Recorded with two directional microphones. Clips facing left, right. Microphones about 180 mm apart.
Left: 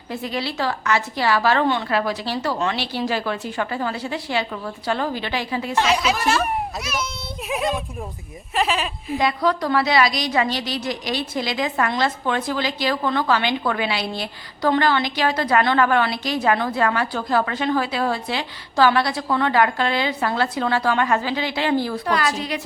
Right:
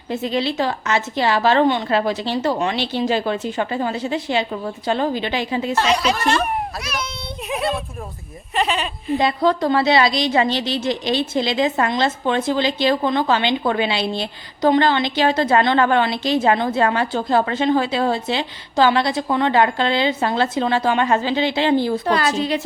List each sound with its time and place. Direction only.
0.1 s a woman's voice: 20° right (ahead or behind)
5.8 s a child's voice: 5° left (ahead or behind)
9.1 s a woman's voice: 25° right (ahead or behind)